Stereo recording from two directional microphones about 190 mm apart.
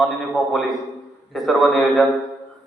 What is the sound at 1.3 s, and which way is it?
Speech, centre (ahead or behind).